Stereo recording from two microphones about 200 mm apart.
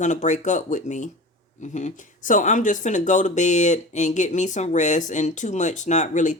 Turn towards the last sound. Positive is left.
turn(degrees=35)  # may be behind; listen again after turning